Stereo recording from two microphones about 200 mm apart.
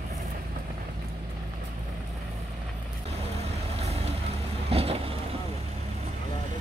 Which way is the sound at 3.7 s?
30° right (ahead or behind).